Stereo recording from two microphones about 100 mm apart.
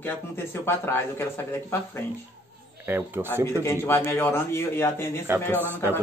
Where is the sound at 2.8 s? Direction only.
20° right (ahead or behind).